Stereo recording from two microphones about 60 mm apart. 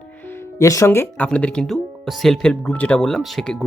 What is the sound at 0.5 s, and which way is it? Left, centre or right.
Speech, left.